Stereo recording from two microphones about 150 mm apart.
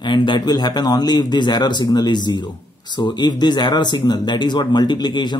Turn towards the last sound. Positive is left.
turn(degrees=30)  # may be behind; listen again after turning